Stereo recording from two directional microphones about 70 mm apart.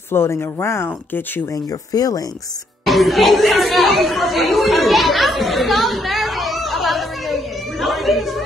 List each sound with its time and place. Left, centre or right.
0.1 s speech: left
1.5 s speech: left
2.8 s speech: centre
7.8 s a sound: centre